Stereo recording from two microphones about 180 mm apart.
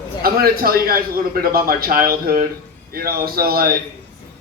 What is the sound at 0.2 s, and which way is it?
A man's voice, 55° right (ahead or behind).